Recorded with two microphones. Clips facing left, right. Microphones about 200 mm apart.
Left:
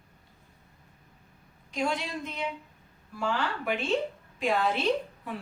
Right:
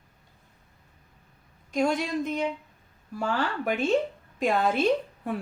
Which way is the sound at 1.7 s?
45° right (ahead or behind).